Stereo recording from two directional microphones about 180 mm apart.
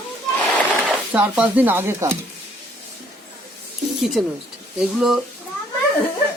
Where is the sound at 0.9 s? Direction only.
10° right (ahead or behind).